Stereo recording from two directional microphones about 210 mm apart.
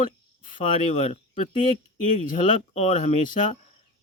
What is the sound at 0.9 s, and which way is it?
Speech, 30° left (ahead or behind).